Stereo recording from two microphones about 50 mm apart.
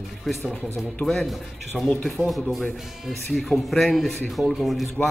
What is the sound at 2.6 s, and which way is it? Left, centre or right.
Speech, centre.